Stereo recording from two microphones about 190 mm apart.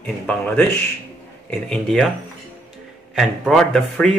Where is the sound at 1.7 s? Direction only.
5° left (ahead or behind).